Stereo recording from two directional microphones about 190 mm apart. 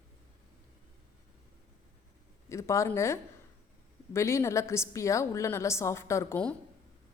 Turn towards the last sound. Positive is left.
turn(degrees=10)  # may be behind; listen again after turning